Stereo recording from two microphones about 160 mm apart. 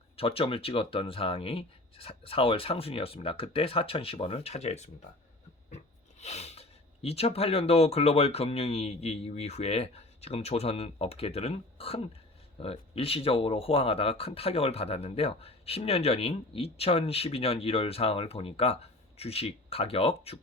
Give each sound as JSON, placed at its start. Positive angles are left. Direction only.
{"t": 0.2, "sound": "speech", "side_deg": 35}